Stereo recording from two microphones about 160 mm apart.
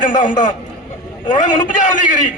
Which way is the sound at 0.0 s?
55° left (ahead or behind).